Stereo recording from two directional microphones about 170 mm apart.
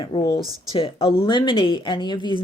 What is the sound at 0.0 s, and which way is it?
A woman's voice, 25° left (ahead or behind).